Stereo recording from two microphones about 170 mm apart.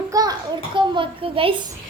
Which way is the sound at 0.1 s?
25° right (ahead or behind).